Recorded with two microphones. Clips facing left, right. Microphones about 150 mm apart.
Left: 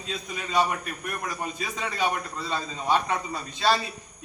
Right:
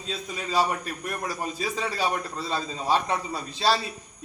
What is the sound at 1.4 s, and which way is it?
A man's voice, 35° right (ahead or behind).